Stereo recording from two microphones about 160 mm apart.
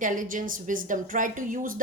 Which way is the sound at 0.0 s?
55° right (ahead or behind).